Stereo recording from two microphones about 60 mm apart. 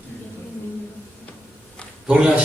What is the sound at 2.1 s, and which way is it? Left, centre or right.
Speech, centre.